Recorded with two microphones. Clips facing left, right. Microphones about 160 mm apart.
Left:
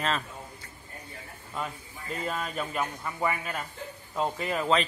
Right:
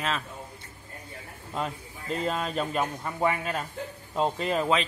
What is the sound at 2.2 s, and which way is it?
Speech, 30° right (ahead or behind).